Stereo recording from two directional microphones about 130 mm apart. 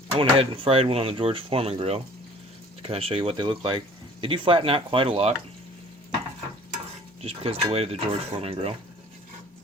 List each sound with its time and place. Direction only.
0.2 s speech: 40° right (ahead or behind)
7.2 s speech: 50° right (ahead or behind)